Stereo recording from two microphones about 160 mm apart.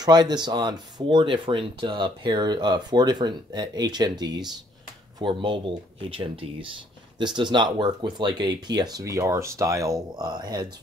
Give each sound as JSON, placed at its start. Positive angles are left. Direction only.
{"t": 0.0, "sound": "speech", "side_deg": -25}